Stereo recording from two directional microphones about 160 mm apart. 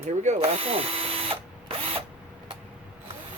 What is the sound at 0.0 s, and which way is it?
Speech, 45° right (ahead or behind).